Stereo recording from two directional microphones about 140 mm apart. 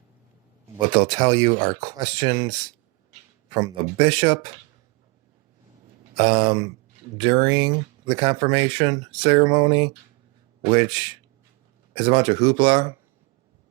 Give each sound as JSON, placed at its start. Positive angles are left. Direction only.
{"t": 0.9, "sound": "speech", "side_deg": -35}
{"t": 3.5, "sound": "speech", "side_deg": -35}
{"t": 6.1, "sound": "speech", "side_deg": -35}
{"t": 9.4, "sound": "speech", "side_deg": -30}